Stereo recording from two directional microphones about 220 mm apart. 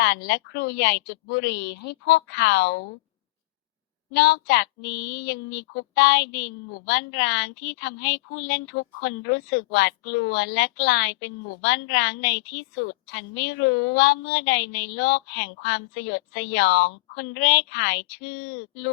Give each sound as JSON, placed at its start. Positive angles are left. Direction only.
{"t": 0.0, "sound": "a woman's voice", "side_deg": 45}
{"t": 4.1, "sound": "a woman's voice", "side_deg": 50}